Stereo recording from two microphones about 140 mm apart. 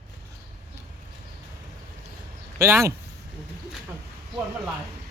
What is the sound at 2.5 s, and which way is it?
Speech, 20° right (ahead or behind).